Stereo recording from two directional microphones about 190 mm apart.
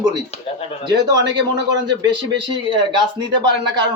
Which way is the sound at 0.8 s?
25° right (ahead or behind).